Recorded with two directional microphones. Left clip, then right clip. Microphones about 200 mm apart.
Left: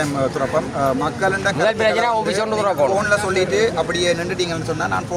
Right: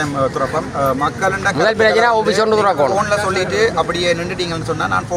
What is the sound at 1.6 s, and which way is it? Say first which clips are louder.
A man's voice: right 5 dB; 40° right (ahead or behind).